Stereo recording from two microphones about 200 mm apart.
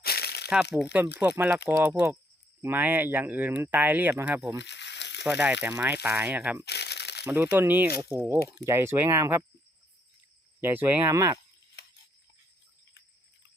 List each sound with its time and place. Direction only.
0.0 s crumpling: 50° left (ahead or behind)
0.5 s speech: 5° right (ahead or behind)
4.5 s a sound: 60° left (ahead or behind)
5.2 s speech: 5° right (ahead or behind)
6.7 s crumpling: 55° left (ahead or behind)
7.3 s speech: 15° right (ahead or behind)
10.6 s speech: 10° right (ahead or behind)